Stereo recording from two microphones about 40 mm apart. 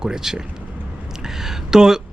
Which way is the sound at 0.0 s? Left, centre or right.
Centre.